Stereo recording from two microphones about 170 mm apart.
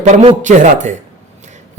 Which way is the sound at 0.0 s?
45° right (ahead or behind).